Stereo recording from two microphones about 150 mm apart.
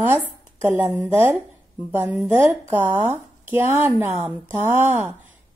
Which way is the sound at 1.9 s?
15° right (ahead or behind).